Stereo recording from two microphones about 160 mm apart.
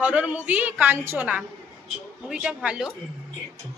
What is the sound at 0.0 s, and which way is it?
A woman's voice, 10° right (ahead or behind).